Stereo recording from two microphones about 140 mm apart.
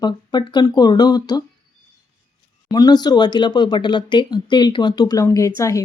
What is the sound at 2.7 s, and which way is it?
A woman's voice, 25° left (ahead or behind).